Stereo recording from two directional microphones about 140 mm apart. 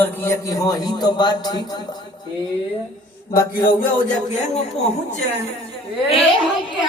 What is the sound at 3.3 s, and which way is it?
A man's voice, 70° left (ahead or behind).